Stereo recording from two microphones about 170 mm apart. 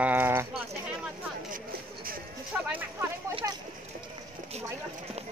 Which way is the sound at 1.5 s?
60° right (ahead or behind).